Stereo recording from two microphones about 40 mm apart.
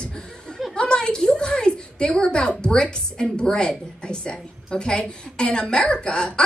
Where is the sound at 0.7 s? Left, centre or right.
Left.